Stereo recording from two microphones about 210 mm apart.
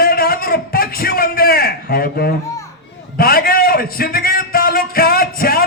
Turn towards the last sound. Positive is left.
turn(degrees=45)  # may be behind; listen again after turning